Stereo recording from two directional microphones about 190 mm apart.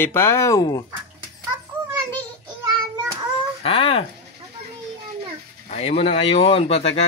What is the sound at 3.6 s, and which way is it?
Speech, 30° left (ahead or behind).